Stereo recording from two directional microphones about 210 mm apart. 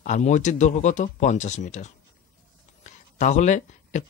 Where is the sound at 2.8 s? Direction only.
35° left (ahead or behind).